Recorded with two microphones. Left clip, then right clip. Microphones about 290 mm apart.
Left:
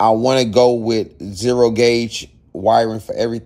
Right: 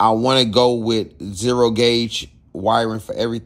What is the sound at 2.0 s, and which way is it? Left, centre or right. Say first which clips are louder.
Speech: right 1 dB; left.